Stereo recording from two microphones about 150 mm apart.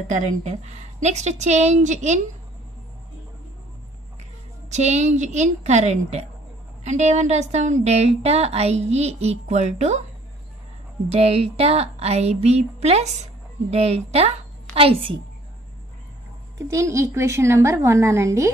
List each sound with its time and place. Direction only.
0.1 s speech: 50° right (ahead or behind)
4.6 s speech: 50° right (ahead or behind)
11.1 s speech: 45° right (ahead or behind)
16.5 s a woman's voice: 20° right (ahead or behind)